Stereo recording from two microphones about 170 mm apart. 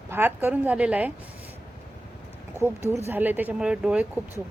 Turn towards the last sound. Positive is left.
turn(degrees=-5)  # may be behind; listen again after turning